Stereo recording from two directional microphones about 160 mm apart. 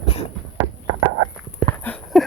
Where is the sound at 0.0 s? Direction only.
40° left (ahead or behind).